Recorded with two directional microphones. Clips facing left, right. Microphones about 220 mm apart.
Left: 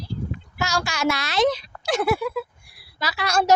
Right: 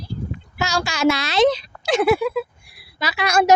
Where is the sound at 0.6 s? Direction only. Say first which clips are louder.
Right 4 dB; 25° right (ahead or behind).